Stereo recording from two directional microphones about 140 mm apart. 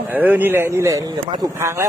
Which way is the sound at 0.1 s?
15° right (ahead or behind).